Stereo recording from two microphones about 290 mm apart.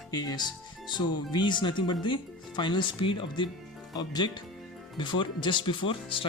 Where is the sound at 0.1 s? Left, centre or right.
Centre.